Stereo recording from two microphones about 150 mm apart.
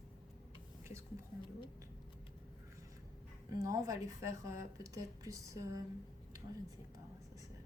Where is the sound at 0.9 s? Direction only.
20° right (ahead or behind).